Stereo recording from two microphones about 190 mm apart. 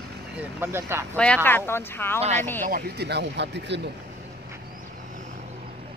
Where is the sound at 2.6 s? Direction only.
55° right (ahead or behind).